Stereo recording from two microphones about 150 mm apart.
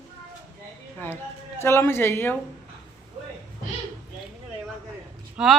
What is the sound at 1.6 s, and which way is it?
Speech, 15° left (ahead or behind).